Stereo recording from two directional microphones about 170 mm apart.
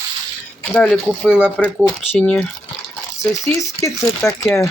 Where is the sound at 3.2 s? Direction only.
20° left (ahead or behind).